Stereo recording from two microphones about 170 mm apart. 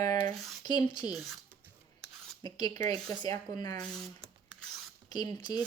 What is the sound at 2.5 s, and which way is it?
Speech, 25° left (ahead or behind).